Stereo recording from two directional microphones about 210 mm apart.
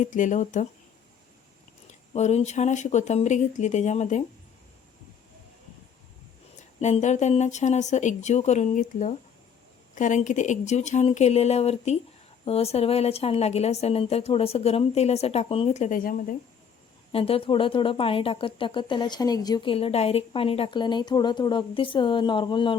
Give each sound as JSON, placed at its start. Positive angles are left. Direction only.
{"t": 0.0, "sound": "speech", "side_deg": 35}
{"t": 1.9, "sound": "speech", "side_deg": 30}
{"t": 6.7, "sound": "speech", "side_deg": 30}
{"t": 17.1, "sound": "speech", "side_deg": 25}